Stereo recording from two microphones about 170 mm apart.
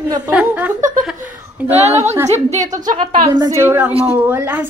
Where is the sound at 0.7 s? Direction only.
50° right (ahead or behind).